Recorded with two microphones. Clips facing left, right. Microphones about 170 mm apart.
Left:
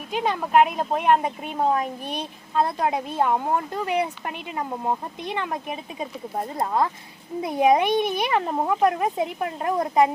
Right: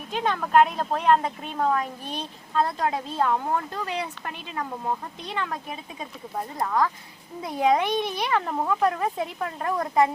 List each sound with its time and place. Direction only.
0.1 s a child's voice: 10° left (ahead or behind)